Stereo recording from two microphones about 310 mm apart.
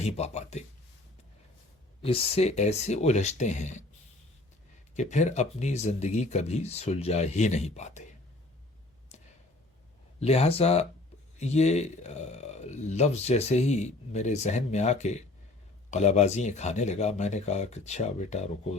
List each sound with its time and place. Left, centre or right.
0.0 s a man's voice: left
2.0 s a man's voice: centre
4.9 s a man's voice: left
10.2 s a man's voice: centre